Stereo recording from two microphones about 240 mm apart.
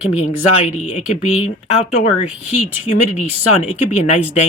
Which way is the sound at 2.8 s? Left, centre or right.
Left.